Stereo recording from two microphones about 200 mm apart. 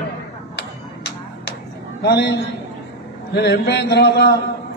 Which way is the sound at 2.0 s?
55° left (ahead or behind).